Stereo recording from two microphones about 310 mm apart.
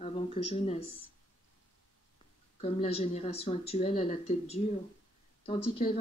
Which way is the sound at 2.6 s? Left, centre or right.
Centre.